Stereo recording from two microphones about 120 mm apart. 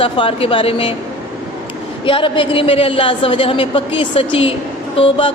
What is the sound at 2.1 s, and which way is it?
A woman's voice, 45° left (ahead or behind).